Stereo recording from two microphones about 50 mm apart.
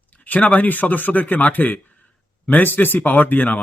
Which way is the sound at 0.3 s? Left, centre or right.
Left.